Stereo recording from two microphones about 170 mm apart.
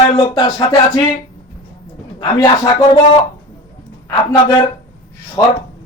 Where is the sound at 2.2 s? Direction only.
25° left (ahead or behind).